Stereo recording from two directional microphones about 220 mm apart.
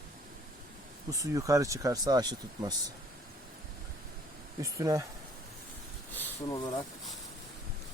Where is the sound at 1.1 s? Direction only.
15° right (ahead or behind).